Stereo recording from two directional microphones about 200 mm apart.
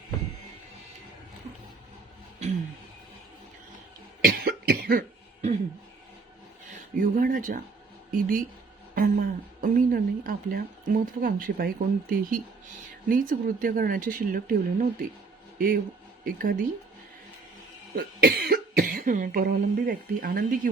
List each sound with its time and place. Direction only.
2.4 s a sound: 30° right (ahead or behind)
4.2 s cough: 50° right (ahead or behind)
7.0 s speech: 45° right (ahead or behind)
17.9 s cough: 50° right (ahead or behind)